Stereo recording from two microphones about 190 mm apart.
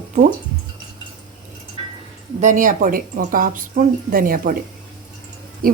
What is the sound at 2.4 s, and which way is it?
A woman's voice, 40° right (ahead or behind).